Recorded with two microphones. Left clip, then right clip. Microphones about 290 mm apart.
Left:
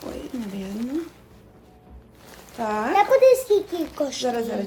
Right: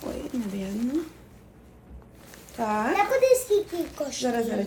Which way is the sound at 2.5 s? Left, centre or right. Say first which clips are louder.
Left 2 dB; centre.